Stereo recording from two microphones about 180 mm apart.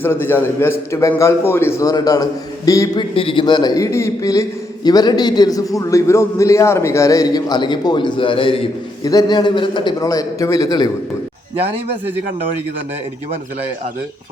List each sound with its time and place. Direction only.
0.0 s a man's voice: 10° left (ahead or behind)